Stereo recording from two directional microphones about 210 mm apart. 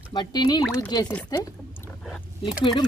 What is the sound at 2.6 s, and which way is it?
Speech, 20° left (ahead or behind).